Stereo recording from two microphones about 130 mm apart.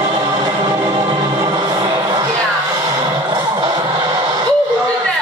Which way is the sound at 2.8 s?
30° right (ahead or behind).